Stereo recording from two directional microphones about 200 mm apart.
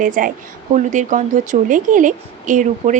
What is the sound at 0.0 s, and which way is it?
A woman's voice, 40° right (ahead or behind).